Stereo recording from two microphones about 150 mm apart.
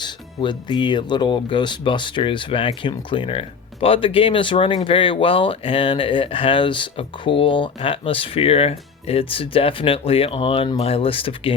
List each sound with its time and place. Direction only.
0.0 s speech: 30° left (ahead or behind)